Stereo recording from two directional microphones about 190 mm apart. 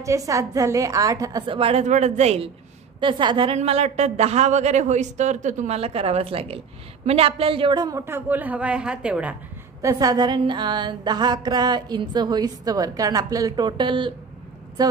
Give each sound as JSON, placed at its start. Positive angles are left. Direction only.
{"t": 0.0, "sound": "a woman's voice", "side_deg": -15}